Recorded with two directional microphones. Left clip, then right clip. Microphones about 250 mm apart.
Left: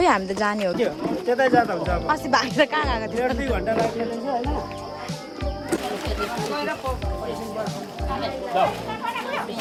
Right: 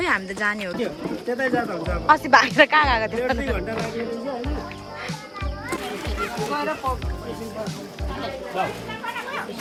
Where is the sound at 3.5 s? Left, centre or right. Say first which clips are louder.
Left 4 dB; left.